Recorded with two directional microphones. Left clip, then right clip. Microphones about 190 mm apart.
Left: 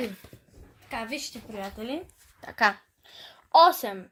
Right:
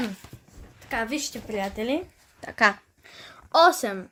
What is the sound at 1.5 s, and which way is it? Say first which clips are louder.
Speech: right 8 dB; 60° right (ahead or behind).